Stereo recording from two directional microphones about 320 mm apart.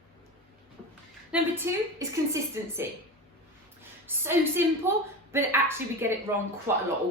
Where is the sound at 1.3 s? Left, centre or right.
Centre.